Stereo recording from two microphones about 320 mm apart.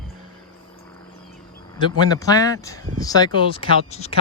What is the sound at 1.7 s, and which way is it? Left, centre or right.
Speech, centre.